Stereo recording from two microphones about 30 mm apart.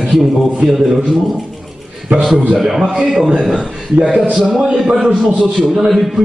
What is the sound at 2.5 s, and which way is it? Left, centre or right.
Speech, centre.